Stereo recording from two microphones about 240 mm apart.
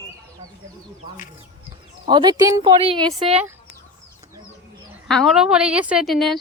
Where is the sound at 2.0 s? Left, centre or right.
Centre.